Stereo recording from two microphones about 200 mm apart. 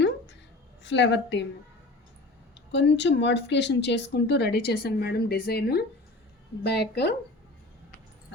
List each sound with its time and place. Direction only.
0.8 s speech: 60° left (ahead or behind)
2.6 s speech: 60° left (ahead or behind)